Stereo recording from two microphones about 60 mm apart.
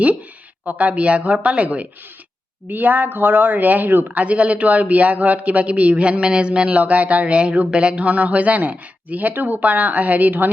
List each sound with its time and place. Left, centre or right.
0.6 s a man's voice: right